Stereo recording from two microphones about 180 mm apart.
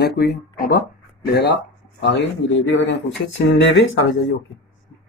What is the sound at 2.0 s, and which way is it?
A man's voice, 85° left.